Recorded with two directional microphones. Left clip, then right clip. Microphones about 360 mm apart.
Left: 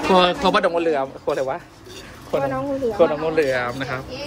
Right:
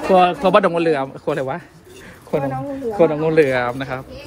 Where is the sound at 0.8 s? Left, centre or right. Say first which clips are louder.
Right 2 dB; centre.